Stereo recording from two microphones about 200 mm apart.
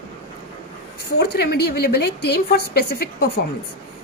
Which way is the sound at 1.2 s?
55° left (ahead or behind).